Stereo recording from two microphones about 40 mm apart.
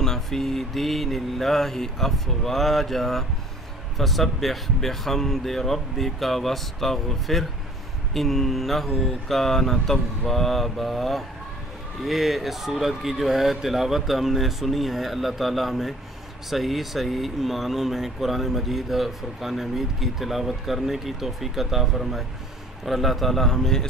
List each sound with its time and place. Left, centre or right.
0.0 s a man's voice: centre